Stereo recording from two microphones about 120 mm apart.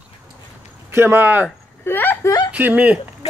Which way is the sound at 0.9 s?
20° right (ahead or behind).